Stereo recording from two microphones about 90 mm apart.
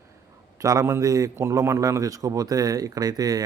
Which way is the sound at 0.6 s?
40° right (ahead or behind).